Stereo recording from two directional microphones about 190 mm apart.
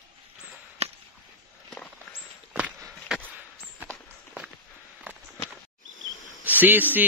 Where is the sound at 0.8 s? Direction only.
35° right (ahead or behind).